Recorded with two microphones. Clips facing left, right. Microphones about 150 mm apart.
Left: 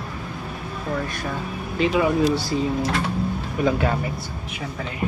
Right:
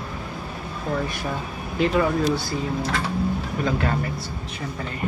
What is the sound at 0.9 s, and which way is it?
Speech, 10° right (ahead or behind).